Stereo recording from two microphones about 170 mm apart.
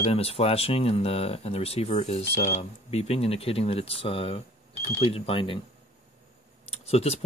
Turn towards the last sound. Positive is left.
turn(degrees=40)  # may be behind; listen again after turning